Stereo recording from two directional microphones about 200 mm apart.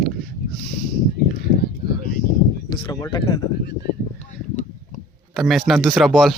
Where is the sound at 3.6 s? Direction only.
55° left (ahead or behind).